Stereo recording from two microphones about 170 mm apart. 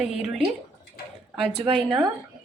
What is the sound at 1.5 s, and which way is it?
Speech, 30° right (ahead or behind).